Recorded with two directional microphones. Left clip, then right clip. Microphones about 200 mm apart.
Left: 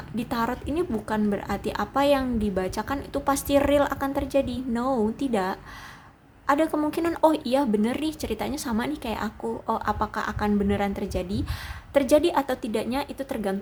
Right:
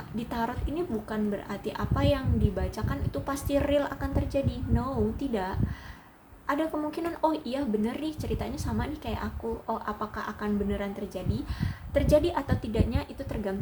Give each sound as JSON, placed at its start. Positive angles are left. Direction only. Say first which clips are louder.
{"t": 0.2, "sound": "a woman's voice", "louder": "left 5 dB", "side_deg": 30}